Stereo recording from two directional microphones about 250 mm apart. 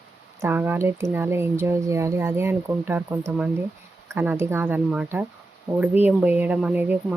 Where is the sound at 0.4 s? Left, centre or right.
Centre.